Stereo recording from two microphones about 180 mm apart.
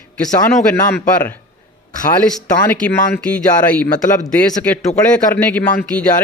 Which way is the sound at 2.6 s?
5° left (ahead or behind).